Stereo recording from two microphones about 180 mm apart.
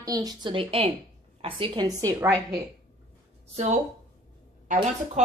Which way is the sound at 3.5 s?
40° right (ahead or behind).